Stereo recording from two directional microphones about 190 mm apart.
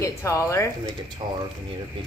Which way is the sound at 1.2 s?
25° right (ahead or behind).